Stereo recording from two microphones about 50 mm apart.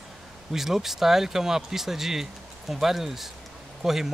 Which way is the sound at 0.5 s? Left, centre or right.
Centre.